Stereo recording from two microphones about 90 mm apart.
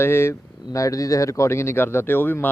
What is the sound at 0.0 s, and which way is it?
Speech, 30° left (ahead or behind).